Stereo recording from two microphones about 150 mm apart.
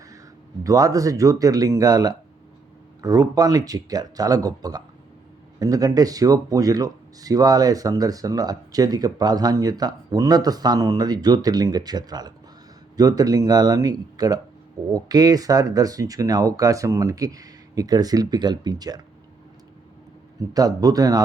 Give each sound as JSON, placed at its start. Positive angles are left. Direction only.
{"t": 0.6, "sound": "speech", "side_deg": -20}
{"t": 20.5, "sound": "speech", "side_deg": -25}